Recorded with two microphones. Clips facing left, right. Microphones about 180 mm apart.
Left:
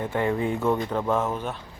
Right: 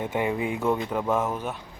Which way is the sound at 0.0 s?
15° right (ahead or behind).